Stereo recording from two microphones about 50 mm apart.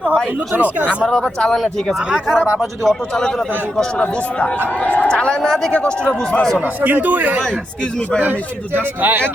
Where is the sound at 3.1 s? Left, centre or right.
Centre.